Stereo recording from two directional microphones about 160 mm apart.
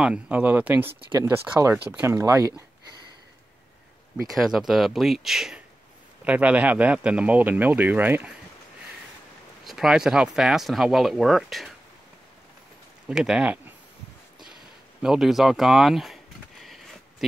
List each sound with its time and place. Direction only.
0.0 s speech: 10° right (ahead or behind)
4.3 s speech: centre (ahead or behind)
9.7 s speech: centre (ahead or behind)
13.1 s speech: 5° right (ahead or behind)
14.4 s a sound: 5° right (ahead or behind)